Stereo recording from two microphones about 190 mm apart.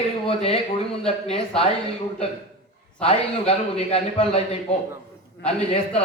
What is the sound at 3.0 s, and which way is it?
A man's voice, 30° left (ahead or behind).